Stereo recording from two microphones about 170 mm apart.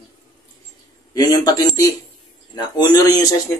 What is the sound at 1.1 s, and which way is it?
Speech, 25° left (ahead or behind).